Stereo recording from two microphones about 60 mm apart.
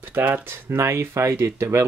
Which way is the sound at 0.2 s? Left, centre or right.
Right.